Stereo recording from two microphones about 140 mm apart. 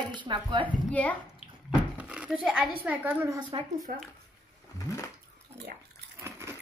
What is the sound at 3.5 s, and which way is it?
Speech, 40° right (ahead or behind).